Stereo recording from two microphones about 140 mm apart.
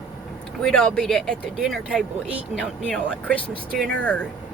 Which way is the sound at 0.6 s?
5° left (ahead or behind).